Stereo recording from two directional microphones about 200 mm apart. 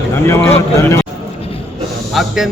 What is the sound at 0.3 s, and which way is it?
Speech, 15° left (ahead or behind).